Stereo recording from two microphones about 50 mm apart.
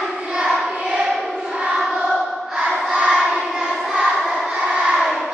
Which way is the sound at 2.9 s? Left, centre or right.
Right.